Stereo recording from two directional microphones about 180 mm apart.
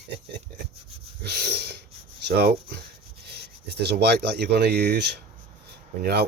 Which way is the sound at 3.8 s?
65° right (ahead or behind).